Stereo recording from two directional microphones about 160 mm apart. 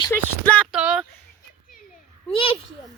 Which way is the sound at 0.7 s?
5° right (ahead or behind).